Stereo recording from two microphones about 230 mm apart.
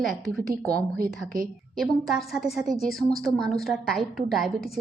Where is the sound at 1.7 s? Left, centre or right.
Centre.